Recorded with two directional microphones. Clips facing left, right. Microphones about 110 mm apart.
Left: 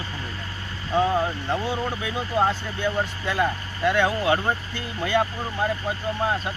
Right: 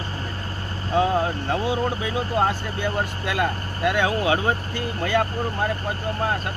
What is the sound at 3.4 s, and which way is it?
Speech, 5° right (ahead or behind).